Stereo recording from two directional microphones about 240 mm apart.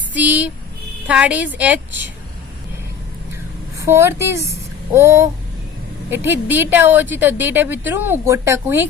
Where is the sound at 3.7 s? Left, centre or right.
Centre.